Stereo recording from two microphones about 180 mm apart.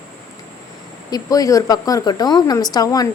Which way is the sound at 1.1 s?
20° left (ahead or behind).